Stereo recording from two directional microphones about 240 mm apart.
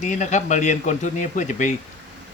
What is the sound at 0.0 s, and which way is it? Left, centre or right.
Speech, left.